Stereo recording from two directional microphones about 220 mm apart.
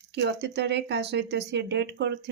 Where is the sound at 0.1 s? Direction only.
50° right (ahead or behind).